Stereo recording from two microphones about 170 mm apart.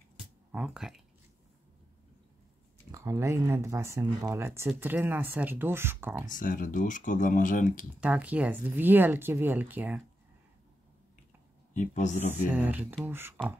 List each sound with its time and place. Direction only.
0.5 s speech: 5° right (ahead or behind)
2.9 s speech: 15° right (ahead or behind)
6.2 s speech: 50° left (ahead or behind)
8.0 s speech: 10° right (ahead or behind)
11.7 s speech: 45° left (ahead or behind)
12.5 s speech: 10° right (ahead or behind)